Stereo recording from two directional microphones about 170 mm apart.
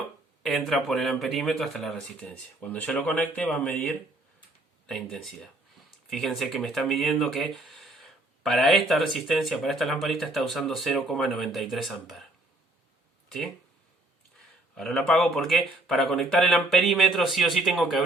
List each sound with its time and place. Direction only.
0.4 s speech: centre (ahead or behind)
13.2 s a sound: centre (ahead or behind)
14.8 s speech: centre (ahead or behind)